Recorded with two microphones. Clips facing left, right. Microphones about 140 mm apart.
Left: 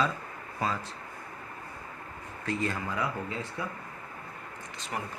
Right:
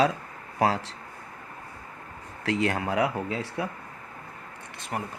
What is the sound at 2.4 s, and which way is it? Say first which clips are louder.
Speech: right 6 dB; 85° right.